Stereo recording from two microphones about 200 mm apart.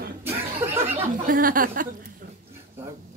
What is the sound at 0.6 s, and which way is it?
Speech, 10° right (ahead or behind).